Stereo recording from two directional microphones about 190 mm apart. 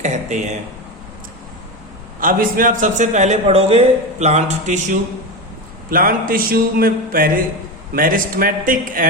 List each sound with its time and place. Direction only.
0.0 s speech: 40° right (ahead or behind)
2.2 s a man's voice: 45° right (ahead or behind)